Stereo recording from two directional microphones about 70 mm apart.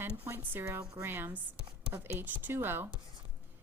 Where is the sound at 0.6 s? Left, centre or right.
Right.